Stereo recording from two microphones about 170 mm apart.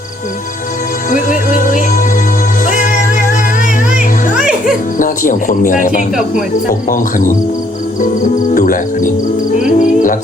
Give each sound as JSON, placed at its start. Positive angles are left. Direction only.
{"t": 1.1, "sound": "music", "side_deg": 50}
{"t": 4.4, "sound": "music", "side_deg": -5}
{"t": 4.9, "sound": "speech", "side_deg": 50}
{"t": 8.5, "sound": "speech", "side_deg": 50}
{"t": 9.7, "sound": "music", "side_deg": 50}